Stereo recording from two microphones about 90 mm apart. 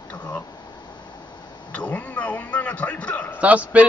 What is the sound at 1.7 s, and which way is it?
Speech, 15° left (ahead or behind).